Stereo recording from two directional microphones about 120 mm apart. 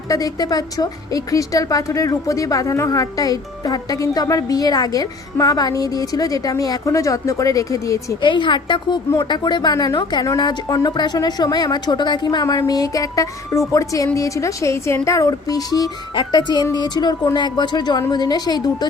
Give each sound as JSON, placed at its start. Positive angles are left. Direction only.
{"t": 0.1, "sound": "a woman's voice", "side_deg": 30}
{"t": 8.2, "sound": "speech", "side_deg": 40}